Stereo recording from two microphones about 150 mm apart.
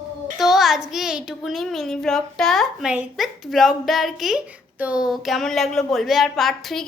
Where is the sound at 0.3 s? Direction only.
Centre (ahead or behind).